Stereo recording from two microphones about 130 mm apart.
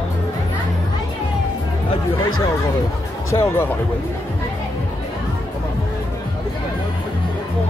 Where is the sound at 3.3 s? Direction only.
20° left (ahead or behind).